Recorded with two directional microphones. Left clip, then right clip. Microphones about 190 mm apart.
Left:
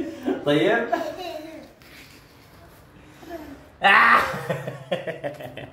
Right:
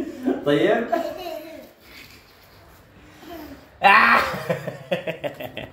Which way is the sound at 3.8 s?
15° right (ahead or behind).